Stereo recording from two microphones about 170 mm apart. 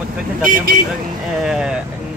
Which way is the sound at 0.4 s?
55° right (ahead or behind).